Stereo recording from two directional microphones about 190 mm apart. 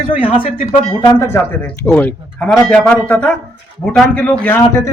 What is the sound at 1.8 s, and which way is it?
A man's voice, 10° left (ahead or behind).